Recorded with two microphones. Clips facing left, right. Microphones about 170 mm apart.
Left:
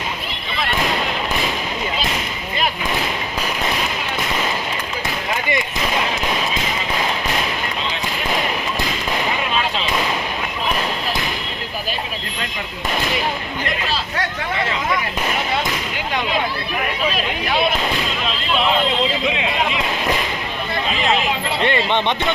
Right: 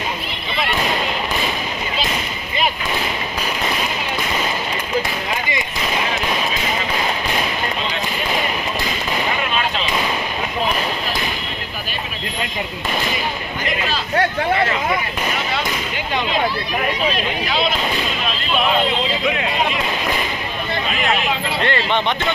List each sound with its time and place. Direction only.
21.6 s vehicle: 20° left (ahead or behind)